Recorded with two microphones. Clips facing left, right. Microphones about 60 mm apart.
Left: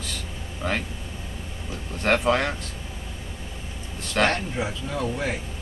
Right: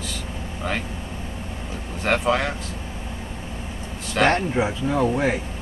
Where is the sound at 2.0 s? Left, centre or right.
Centre.